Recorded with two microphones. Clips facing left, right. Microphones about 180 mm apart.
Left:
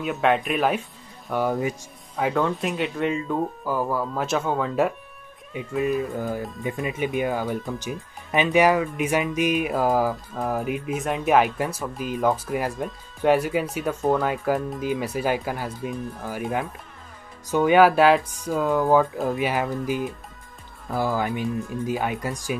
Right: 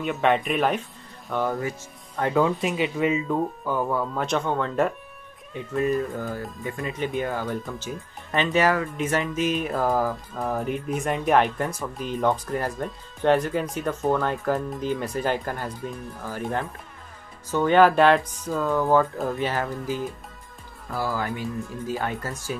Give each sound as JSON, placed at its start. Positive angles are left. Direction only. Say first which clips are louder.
{"t": 0.0, "sound": "speech", "louder": "even", "side_deg": 0}
{"t": 2.3, "sound": "speech", "louder": "right 5 dB", "side_deg": 0}
{"t": 6.1, "sound": "speech", "louder": "left 3 dB", "side_deg": 15}